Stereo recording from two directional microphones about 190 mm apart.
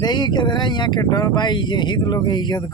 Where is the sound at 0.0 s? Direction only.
20° left (ahead or behind).